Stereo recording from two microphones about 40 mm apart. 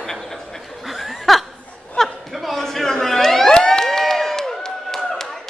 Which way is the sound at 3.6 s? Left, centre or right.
Centre.